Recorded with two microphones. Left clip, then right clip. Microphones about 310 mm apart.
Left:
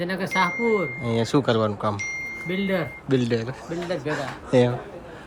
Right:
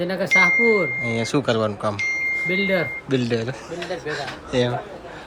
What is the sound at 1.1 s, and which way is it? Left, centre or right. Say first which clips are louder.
Speech: even; centre.